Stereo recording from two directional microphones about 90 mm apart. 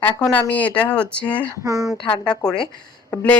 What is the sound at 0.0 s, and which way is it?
Speech, 20° left (ahead or behind).